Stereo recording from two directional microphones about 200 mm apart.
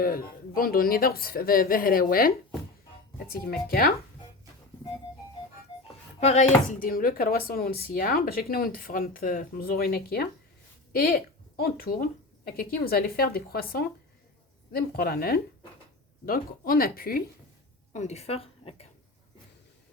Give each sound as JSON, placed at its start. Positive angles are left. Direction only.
{"t": 0.0, "sound": "speech", "side_deg": 45}
{"t": 6.1, "sound": "speech", "side_deg": 35}
{"t": 17.9, "sound": "speech", "side_deg": 35}